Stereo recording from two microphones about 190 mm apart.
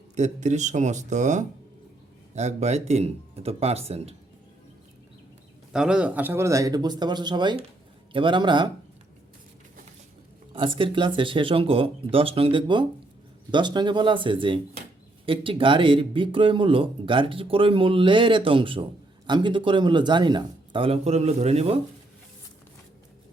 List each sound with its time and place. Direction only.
0.2 s speech: 40° right (ahead or behind)
5.7 s speech: 5° right (ahead or behind); by 8.7 s 25° right (ahead or behind)
10.5 s speech: 25° right (ahead or behind)